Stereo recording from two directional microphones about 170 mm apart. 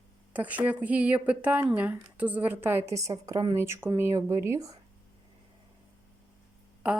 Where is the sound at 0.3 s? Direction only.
10° right (ahead or behind).